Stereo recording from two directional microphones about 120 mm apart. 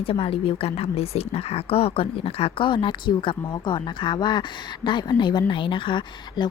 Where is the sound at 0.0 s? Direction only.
50° left (ahead or behind).